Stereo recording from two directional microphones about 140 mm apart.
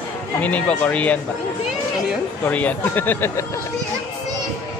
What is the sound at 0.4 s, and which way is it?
Speech, 10° left (ahead or behind).